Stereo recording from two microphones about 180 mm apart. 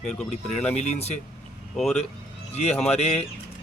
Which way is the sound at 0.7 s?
35° left (ahead or behind).